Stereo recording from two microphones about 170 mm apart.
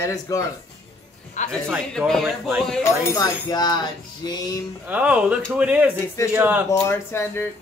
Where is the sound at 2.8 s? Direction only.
20° left (ahead or behind).